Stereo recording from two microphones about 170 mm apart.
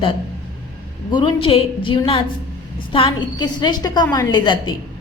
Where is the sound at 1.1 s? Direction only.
30° left (ahead or behind).